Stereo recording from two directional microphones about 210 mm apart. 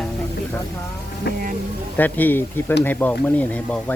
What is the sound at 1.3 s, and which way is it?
Speech, 50° left (ahead or behind).